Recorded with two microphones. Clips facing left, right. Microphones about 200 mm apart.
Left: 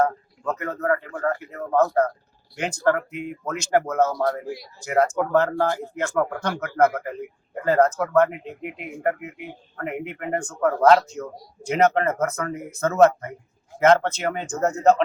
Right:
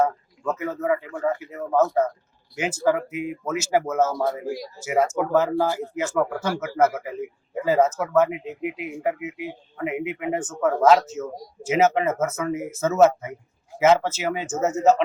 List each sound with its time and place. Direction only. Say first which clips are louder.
0.0 s speech: even; 5° right (ahead or behind)
4.4 s speech: right 4 dB; 40° right (ahead or behind)
4.8 s a man's voice: left 1 dB; 5° right (ahead or behind)